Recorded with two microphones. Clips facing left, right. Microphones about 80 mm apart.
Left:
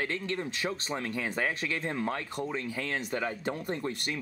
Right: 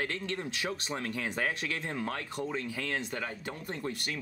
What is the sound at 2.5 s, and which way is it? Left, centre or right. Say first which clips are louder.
Speech: left 1 dB; left.